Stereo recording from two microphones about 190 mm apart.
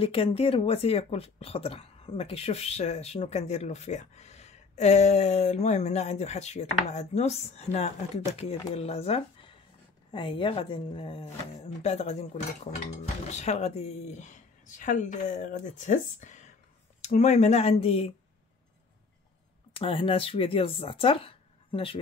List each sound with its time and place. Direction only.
0.0 s speech: 30° left (ahead or behind)
13.3 s speech: 35° left (ahead or behind)
19.8 s speech: 30° left (ahead or behind)